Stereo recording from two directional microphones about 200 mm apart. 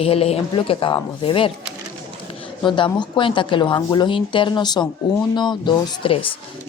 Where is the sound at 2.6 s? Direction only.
25° left (ahead or behind).